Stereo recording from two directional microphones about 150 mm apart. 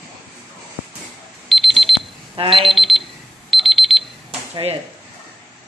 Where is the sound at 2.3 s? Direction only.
35° right (ahead or behind).